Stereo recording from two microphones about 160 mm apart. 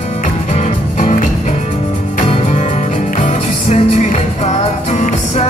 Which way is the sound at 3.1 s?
45° left (ahead or behind).